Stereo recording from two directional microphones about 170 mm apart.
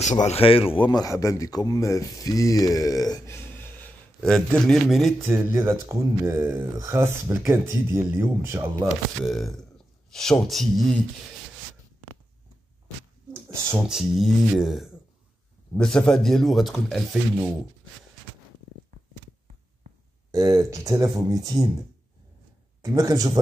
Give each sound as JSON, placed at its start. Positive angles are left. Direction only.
{"t": 0.0, "sound": "a man's voice", "side_deg": 45}
{"t": 5.3, "sound": "speech", "side_deg": -15}
{"t": 8.8, "sound": "speech", "side_deg": 0}
{"t": 13.3, "sound": "a sound", "side_deg": -15}
{"t": 13.8, "sound": "speech", "side_deg": 0}
{"t": 20.2, "sound": "speech", "side_deg": -20}
{"t": 22.8, "sound": "speech", "side_deg": -20}